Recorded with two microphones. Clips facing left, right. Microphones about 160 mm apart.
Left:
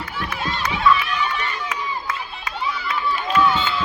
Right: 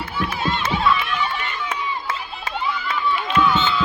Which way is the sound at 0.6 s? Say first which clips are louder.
Left 3 dB; 30° right (ahead or behind).